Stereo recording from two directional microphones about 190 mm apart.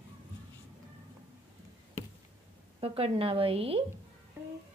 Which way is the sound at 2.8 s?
30° right (ahead or behind).